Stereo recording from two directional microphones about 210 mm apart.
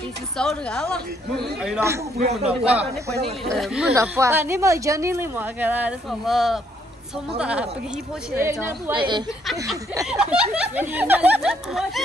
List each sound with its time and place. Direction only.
0.4 s speech: 5° left (ahead or behind)
2.2 s speech: 30° right (ahead or behind)
2.7 s speech: 5° right (ahead or behind)
3.9 s speech: 15° right (ahead or behind)
10.0 s speech: 5° right (ahead or behind)